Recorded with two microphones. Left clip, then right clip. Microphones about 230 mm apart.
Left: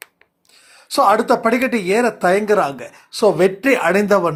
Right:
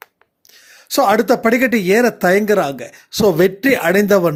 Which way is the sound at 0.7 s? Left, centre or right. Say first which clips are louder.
Even; right.